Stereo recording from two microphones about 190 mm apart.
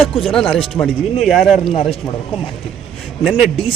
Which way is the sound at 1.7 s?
30° left (ahead or behind).